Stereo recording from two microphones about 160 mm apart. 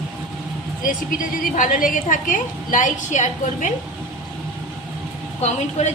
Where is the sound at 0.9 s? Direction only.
55° left (ahead or behind).